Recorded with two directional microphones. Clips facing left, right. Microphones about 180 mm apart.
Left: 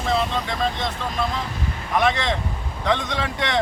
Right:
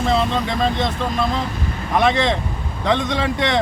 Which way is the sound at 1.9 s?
25° right (ahead or behind).